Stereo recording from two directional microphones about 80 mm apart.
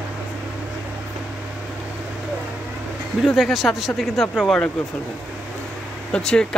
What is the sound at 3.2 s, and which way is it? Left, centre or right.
Speech, centre.